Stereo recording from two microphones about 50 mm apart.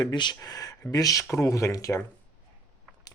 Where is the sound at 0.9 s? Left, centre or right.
Left.